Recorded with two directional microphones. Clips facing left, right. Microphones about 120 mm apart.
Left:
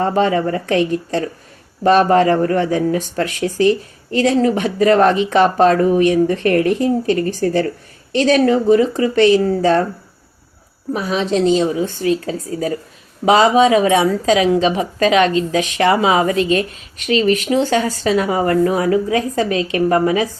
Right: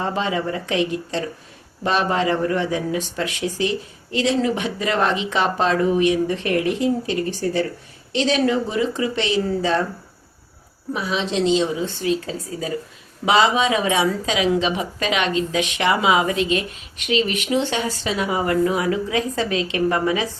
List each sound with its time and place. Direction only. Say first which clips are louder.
0.0 s speech: left 7 dB; 45° left (ahead or behind)
10.9 s speech: left 5 dB; 45° left (ahead or behind)